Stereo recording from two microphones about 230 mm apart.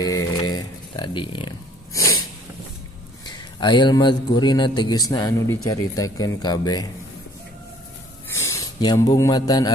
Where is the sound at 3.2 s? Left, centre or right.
Centre.